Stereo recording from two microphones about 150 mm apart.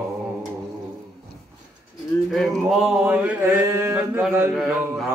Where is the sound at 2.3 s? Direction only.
Centre (ahead or behind).